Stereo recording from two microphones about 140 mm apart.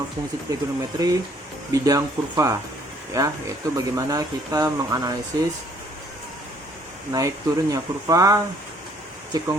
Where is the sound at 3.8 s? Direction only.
25° right (ahead or behind).